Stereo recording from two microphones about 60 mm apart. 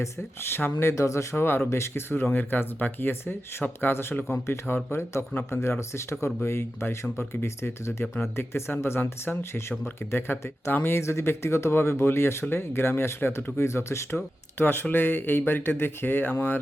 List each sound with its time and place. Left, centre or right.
0.0 s speech: left
4.3 s speech: left
14.6 s speech: left